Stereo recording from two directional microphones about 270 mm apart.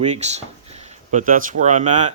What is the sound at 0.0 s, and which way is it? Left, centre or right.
Speech, right.